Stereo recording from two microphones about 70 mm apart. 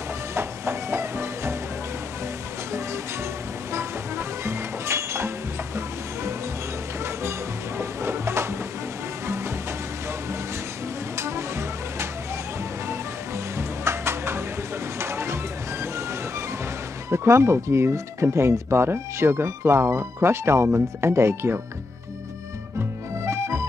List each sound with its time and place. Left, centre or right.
0.3 s music: right
3.7 s music: right
8.0 s music: right
11.1 s music: right
13.6 s a sound: right
17.1 s speech: right
23.2 s music: right